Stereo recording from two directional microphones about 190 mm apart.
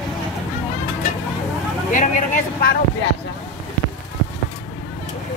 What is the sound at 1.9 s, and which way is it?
Speech, 45° left (ahead or behind).